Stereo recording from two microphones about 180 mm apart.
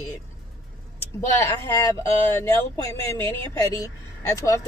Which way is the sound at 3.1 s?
15° left (ahead or behind).